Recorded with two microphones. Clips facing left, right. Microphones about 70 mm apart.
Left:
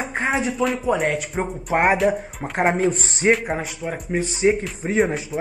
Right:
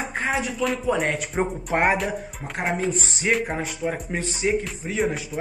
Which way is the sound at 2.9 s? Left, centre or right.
Left.